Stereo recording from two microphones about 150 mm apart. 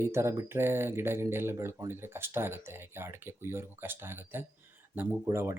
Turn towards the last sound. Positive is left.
turn(degrees=-20)  # may be behind; listen again after turning